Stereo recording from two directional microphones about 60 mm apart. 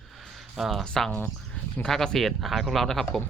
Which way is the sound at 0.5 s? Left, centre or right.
Centre.